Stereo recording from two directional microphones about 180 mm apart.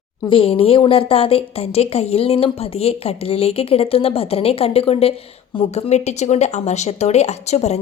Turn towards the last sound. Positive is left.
turn(degrees=40)  # may be behind; listen again after turning